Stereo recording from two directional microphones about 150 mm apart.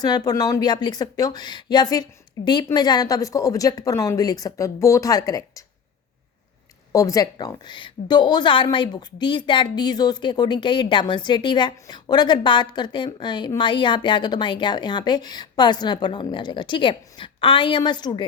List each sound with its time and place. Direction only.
0.0 s a woman's voice: 25° left (ahead or behind)
6.9 s a woman's voice: 20° left (ahead or behind)